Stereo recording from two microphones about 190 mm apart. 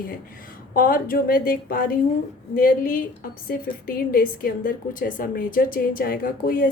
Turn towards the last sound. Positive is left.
turn(degrees=50)  # may be behind; listen again after turning